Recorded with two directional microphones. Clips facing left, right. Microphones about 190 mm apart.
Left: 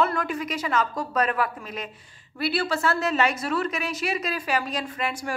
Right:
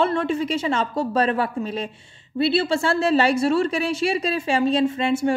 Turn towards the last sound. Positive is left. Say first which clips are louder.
# right 10 dB
turn(degrees=-25)  # may be behind; listen again after turning